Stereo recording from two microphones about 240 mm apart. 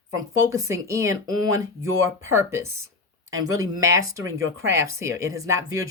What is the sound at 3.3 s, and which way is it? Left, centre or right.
Speech, right.